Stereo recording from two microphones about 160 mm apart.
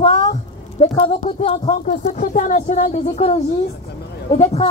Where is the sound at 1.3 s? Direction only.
40° left (ahead or behind).